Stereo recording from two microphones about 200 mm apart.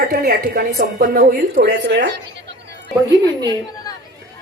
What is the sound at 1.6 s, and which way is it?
Speech, 60° right (ahead or behind).